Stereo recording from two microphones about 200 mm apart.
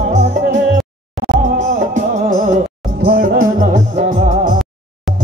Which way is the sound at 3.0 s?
50° right (ahead or behind).